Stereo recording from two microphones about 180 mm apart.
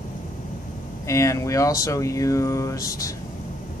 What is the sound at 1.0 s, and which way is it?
Speech, 15° left (ahead or behind).